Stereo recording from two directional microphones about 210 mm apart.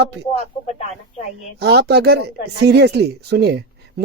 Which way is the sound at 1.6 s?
50° right (ahead or behind).